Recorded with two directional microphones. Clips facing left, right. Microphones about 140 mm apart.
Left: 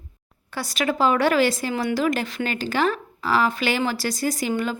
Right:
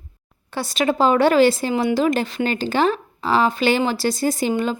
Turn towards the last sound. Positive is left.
turn(degrees=-25)  # may be behind; listen again after turning